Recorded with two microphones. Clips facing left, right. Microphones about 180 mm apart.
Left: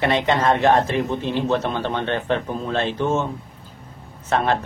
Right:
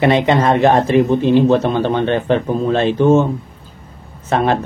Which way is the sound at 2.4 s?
30° right (ahead or behind).